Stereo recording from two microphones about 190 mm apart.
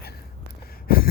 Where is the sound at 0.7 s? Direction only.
50° left (ahead or behind).